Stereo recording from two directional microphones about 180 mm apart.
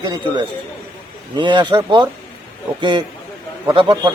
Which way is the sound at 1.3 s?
25° right (ahead or behind).